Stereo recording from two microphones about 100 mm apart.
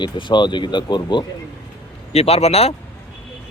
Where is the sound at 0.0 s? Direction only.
50° left (ahead or behind).